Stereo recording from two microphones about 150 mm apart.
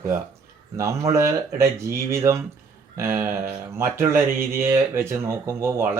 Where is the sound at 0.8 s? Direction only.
20° right (ahead or behind).